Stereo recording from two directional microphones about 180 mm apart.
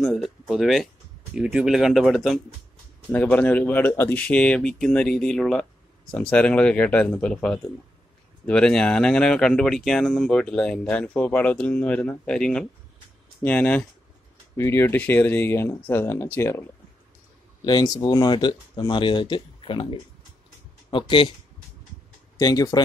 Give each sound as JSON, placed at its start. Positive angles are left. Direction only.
{"t": 0.0, "sound": "a sound", "side_deg": 0}
{"t": 1.3, "sound": "speech", "side_deg": -5}
{"t": 22.4, "sound": "speech", "side_deg": 20}